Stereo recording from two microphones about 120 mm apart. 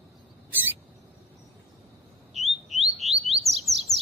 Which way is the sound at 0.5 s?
15° right (ahead or behind).